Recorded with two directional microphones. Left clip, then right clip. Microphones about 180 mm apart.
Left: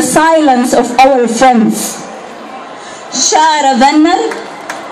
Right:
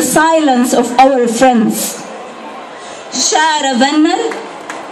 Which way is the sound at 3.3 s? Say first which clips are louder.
Left 4 dB; 20° right (ahead or behind).